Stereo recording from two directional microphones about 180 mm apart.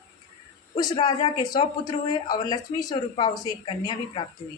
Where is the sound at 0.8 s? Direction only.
20° left (ahead or behind).